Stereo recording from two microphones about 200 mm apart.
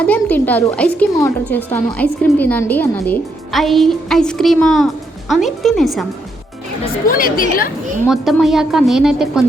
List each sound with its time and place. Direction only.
0.0 s a woman's voice: 10° left (ahead or behind)
7.1 s speech: 45° left (ahead or behind)
8.0 s a woman's voice: centre (ahead or behind)